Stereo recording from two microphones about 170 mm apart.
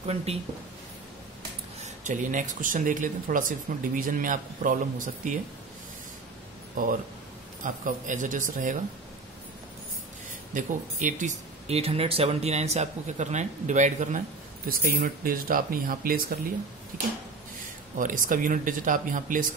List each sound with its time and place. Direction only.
0.0 s speech: 35° right (ahead or behind)
1.8 s speech: 45° right (ahead or behind)
7.6 s speech: 50° right (ahead or behind)
10.5 s speech: 50° right (ahead or behind)
14.7 s speech: 60° right (ahead or behind)
17.9 s speech: 50° right (ahead or behind)